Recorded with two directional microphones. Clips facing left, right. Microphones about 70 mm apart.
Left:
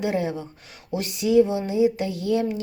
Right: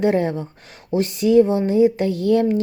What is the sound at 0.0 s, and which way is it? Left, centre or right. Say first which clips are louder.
Speech: right 6 dB; right.